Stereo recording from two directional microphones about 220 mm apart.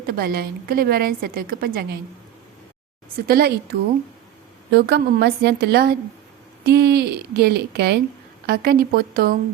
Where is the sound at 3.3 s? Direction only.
45° right (ahead or behind).